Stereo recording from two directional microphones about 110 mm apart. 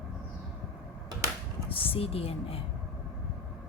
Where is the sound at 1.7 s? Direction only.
55° left (ahead or behind).